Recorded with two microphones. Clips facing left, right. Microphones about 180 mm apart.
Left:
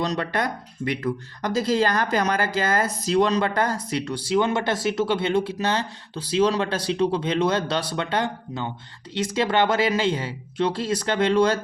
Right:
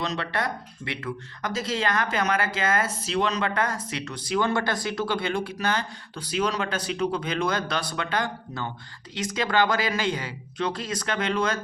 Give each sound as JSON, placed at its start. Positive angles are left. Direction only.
{"t": 0.0, "sound": "speech", "side_deg": 40}